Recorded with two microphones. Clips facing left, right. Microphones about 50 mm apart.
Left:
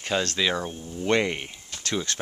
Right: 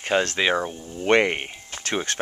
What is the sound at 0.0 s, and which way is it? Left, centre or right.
Speech, right.